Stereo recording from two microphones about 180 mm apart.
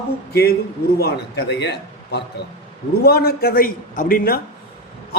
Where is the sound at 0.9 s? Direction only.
60° left (ahead or behind).